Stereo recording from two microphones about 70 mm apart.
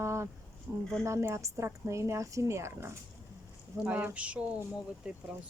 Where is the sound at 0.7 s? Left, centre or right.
Right.